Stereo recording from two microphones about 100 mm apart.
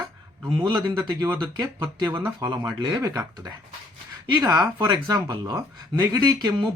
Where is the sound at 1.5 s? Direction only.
40° right (ahead or behind).